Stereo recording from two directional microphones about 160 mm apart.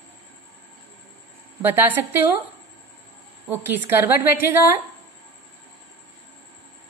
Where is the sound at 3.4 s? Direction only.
10° right (ahead or behind).